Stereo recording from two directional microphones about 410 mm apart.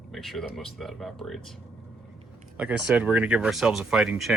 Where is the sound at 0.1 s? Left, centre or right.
Centre.